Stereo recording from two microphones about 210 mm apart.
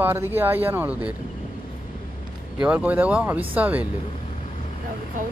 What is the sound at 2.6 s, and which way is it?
Speech, 5° right (ahead or behind).